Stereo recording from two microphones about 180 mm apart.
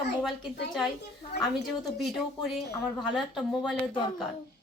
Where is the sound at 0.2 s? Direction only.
Centre (ahead or behind).